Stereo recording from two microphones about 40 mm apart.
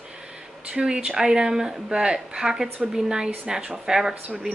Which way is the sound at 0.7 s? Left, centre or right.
Right.